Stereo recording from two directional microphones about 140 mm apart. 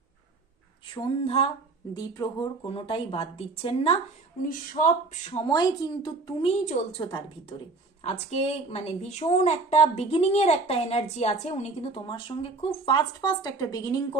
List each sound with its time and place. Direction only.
1.2 s a woman's voice: 45° left (ahead or behind)
2.0 s a woman's voice: 30° left (ahead or behind)
2.6 s a woman's voice: 40° left (ahead or behind)
4.4 s speech: 70° left (ahead or behind)
5.5 s a woman's voice: 30° left (ahead or behind)
6.5 s a woman's voice: 45° left (ahead or behind); by 14.2 s 25° left (ahead or behind)